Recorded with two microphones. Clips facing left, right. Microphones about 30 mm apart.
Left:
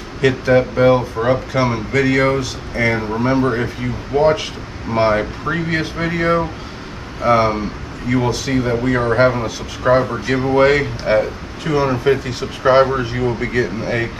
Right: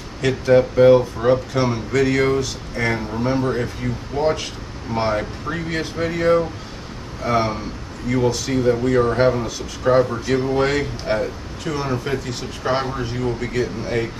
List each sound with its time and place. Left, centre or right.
0.2 s speech: centre